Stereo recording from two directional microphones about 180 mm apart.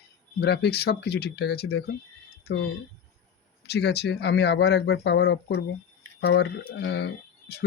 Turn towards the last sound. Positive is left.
turn(degrees=65)  # may be behind; listen again after turning